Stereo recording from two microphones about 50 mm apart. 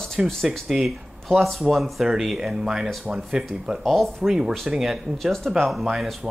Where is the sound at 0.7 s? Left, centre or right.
Centre.